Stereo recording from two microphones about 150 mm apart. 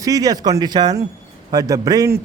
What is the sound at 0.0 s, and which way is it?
A man's voice, 25° right (ahead or behind).